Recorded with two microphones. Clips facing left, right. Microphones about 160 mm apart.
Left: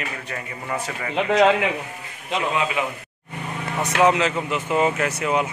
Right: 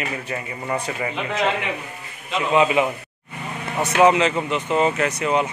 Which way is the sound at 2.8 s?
20° right (ahead or behind).